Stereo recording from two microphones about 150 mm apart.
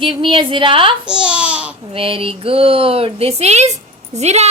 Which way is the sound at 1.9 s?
35° right (ahead or behind).